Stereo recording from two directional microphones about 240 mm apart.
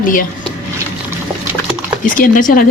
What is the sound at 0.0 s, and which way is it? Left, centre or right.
Speech, left.